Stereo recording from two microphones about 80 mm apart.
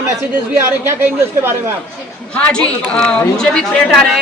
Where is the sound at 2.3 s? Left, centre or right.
Centre.